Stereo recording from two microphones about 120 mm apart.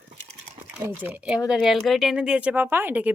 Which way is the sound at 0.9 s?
15° right (ahead or behind).